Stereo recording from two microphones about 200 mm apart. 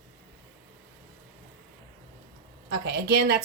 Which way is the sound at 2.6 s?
55° right (ahead or behind).